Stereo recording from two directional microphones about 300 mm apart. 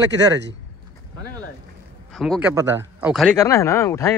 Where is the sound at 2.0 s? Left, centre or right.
Centre.